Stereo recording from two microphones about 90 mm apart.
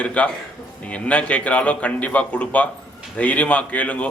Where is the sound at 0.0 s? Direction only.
15° left (ahead or behind).